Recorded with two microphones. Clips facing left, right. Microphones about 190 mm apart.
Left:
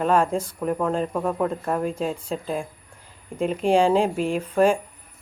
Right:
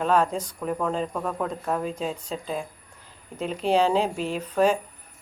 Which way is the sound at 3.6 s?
10° left (ahead or behind).